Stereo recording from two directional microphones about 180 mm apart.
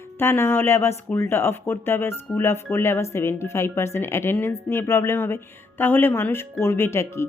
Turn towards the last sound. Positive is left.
turn(degrees=15)  # may be behind; listen again after turning